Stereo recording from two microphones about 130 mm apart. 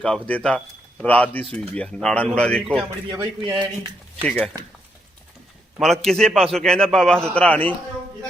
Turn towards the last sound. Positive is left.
turn(degrees=10)  # may be behind; listen again after turning